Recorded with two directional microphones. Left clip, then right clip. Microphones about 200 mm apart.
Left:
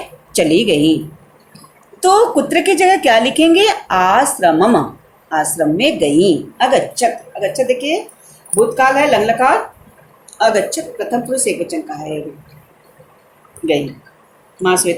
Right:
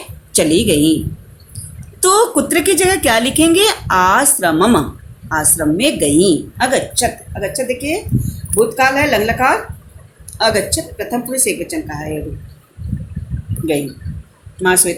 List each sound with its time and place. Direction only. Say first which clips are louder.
0.3 s a woman's voice: left 1 dB; 25° right (ahead or behind)
2.0 s a woman's voice: left 2 dB; 30° right (ahead or behind)